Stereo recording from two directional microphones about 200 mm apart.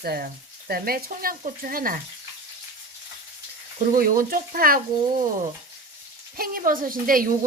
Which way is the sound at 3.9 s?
45° right (ahead or behind).